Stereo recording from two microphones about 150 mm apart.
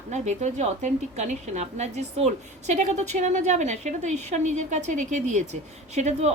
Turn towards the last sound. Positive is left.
turn(degrees=-50)  # may be behind; listen again after turning